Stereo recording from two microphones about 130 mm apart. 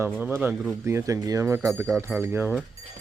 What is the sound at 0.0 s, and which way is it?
Speech, 15° right (ahead or behind).